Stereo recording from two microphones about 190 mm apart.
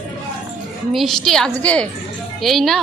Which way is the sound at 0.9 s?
Centre (ahead or behind).